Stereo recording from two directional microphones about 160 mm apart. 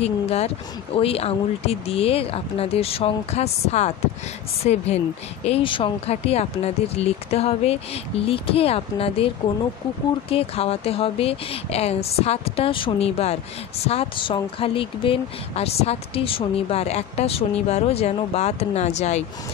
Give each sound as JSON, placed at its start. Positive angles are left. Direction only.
{"t": 0.0, "sound": "speech", "side_deg": 40}
{"t": 10.3, "sound": "speech", "side_deg": 40}